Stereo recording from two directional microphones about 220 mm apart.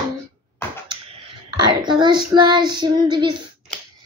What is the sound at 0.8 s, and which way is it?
Child singing, 25° right (ahead or behind).